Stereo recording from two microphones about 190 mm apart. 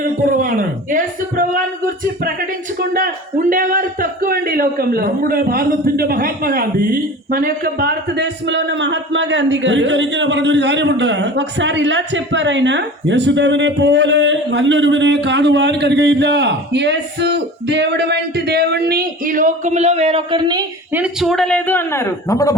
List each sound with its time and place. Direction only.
0.0 s a sound: 45° right (ahead or behind)
2.7 s speech: 50° right (ahead or behind); by 20.7 s 25° right (ahead or behind)
20.9 s a man's voice: 5° right (ahead or behind); by 22.5 s 15° left (ahead or behind)